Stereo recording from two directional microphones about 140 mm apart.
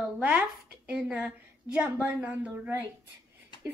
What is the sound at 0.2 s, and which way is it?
A woman's voice, 10° right (ahead or behind).